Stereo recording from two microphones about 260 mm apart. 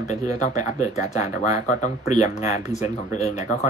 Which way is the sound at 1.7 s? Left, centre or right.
Left.